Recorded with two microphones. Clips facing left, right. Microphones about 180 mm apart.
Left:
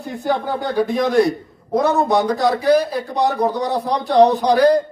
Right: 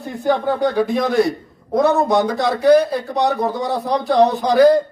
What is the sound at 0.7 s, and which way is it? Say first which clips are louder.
A man's voice: left 1 dB; centre (ahead or behind).